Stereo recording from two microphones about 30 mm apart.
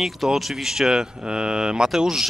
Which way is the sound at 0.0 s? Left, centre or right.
Centre.